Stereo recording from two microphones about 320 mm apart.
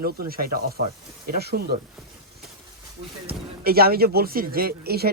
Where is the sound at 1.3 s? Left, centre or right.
Right.